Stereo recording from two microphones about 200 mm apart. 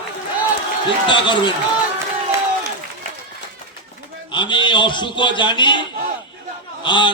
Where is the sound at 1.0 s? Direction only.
25° left (ahead or behind).